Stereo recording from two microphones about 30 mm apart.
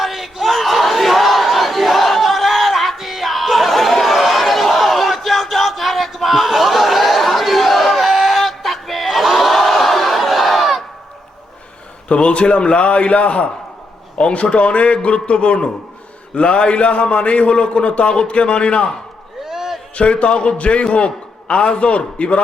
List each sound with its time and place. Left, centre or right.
0.0 s crowd: centre
12.0 s a man's voice: left
19.5 s a sound: centre
20.0 s a man's voice: left